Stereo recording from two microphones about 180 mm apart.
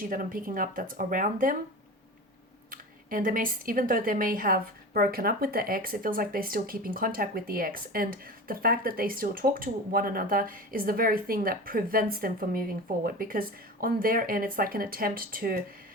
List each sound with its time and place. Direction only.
0.0 s speech: 50° right (ahead or behind)
2.6 s speech: 50° right (ahead or behind)